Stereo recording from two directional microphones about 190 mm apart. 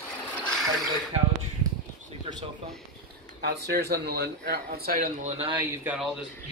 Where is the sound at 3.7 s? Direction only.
60° right (ahead or behind); by 5.5 s 35° right (ahead or behind).